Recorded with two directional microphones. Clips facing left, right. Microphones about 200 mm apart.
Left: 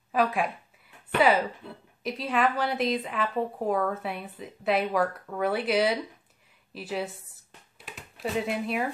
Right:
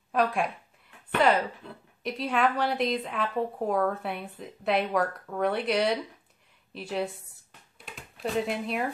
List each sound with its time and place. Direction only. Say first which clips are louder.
0.1 s a woman's voice: even; centre (ahead or behind)